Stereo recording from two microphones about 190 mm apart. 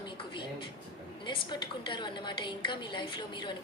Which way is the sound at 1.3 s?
25° left (ahead or behind).